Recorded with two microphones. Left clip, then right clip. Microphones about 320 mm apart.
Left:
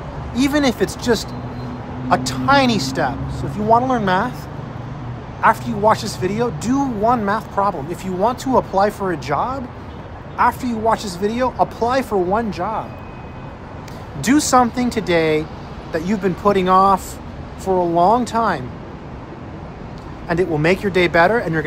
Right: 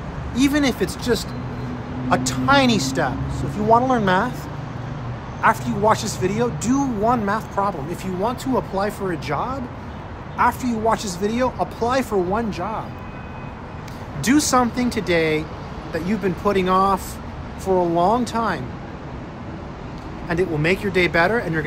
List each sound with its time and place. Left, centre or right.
0.3 s speech: centre
5.4 s speech: centre
14.2 s speech: centre
20.2 s speech: centre